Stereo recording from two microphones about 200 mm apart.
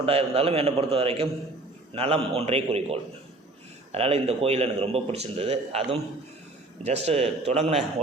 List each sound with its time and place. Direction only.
0.0 s a man's voice: 30° right (ahead or behind)